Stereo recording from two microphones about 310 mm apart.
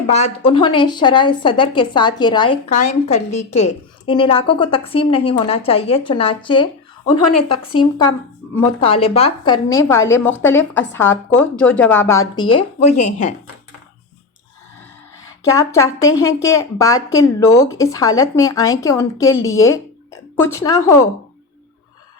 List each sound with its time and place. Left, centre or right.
0.1 s speech: centre
15.5 s speech: centre